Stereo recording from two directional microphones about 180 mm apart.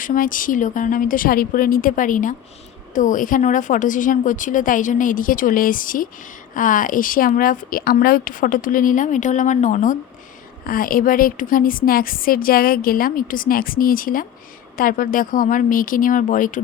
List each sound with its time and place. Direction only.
0.0 s a woman's voice: 50° left (ahead or behind)